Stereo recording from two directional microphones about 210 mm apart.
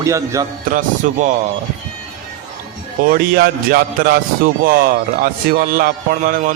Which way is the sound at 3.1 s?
45° right (ahead or behind).